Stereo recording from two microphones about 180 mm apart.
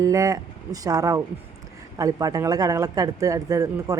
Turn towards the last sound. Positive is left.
turn(degrees=-20)  # may be behind; listen again after turning